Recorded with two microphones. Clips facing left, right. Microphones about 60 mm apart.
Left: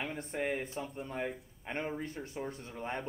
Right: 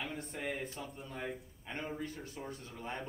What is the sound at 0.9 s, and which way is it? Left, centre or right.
Speech, left.